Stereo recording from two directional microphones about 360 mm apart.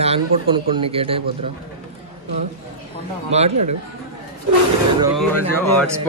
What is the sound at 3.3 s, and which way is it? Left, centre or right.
Speech, centre.